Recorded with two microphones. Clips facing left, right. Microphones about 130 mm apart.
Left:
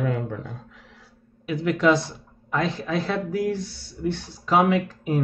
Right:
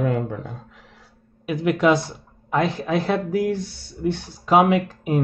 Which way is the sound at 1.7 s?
5° right (ahead or behind).